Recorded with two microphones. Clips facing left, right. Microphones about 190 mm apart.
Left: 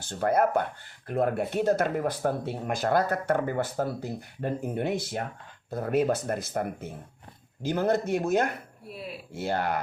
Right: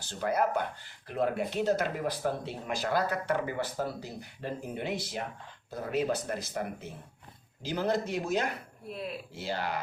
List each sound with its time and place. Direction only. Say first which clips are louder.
0.1 s speech: left 5 dB; 50° left (ahead or behind)